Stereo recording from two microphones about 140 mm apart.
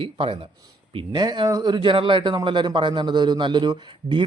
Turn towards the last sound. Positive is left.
turn(degrees=-35)  # may be behind; listen again after turning